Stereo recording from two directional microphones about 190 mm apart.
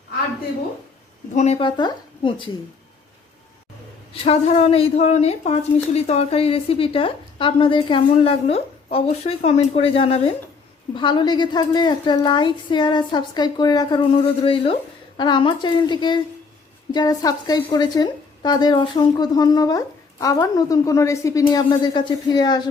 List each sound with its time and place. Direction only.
1.4 s a woman's voice: 30° left (ahead or behind)
4.1 s a woman's voice: 35° left (ahead or behind)